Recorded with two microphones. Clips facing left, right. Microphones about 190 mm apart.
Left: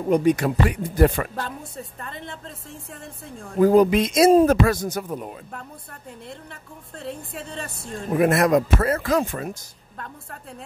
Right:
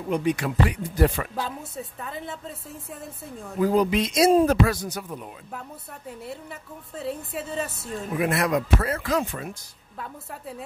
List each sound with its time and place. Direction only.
0.0 s speech: 45° left (ahead or behind)
1.3 s a woman's voice: 5° right (ahead or behind)
3.5 s speech: 45° left (ahead or behind)
6.2 s a woman's voice: 5° right (ahead or behind)
8.1 s speech: 45° left (ahead or behind)